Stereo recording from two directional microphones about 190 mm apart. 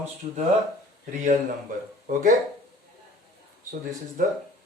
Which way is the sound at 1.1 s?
40° right (ahead or behind).